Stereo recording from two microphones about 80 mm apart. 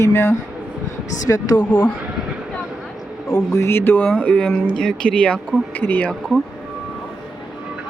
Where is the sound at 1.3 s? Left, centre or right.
Left.